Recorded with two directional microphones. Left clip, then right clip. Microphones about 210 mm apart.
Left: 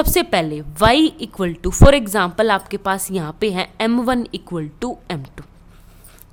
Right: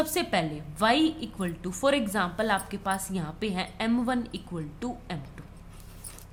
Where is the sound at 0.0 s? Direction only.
50° left (ahead or behind).